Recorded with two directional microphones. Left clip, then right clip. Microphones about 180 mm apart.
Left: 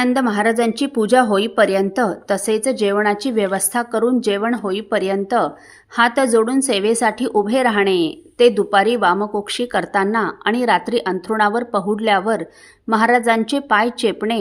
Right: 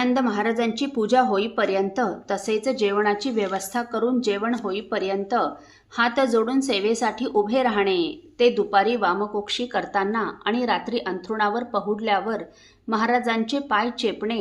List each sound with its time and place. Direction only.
0.0 s a woman's voice: 35° left (ahead or behind)